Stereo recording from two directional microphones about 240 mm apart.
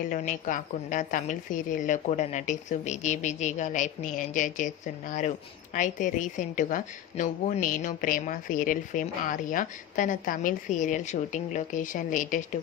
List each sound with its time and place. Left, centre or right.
0.0 s a woman's voice: left